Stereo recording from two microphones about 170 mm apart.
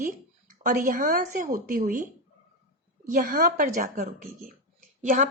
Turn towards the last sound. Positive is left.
turn(degrees=-50)  # may be behind; listen again after turning